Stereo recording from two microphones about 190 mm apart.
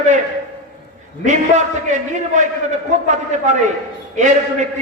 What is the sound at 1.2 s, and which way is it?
A man's voice, 40° right (ahead or behind).